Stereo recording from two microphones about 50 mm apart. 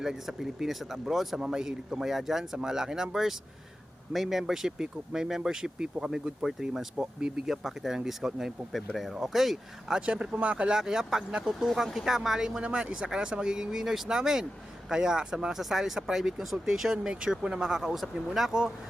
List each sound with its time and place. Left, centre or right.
0.0 s speech: centre
6.9 s speech: centre
7.4 s speech: centre
8.7 s speech: centre
9.9 s speech: centre
10.8 s speech: centre
12.6 s speech: right
15.5 s speech: centre